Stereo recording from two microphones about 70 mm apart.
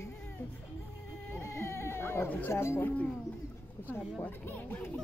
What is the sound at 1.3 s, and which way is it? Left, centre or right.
Cat, left.